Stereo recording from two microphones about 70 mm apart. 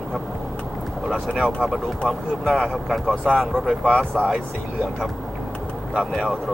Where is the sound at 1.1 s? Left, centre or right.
Centre.